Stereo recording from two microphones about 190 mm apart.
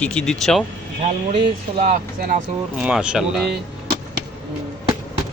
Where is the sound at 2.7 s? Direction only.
5° right (ahead or behind).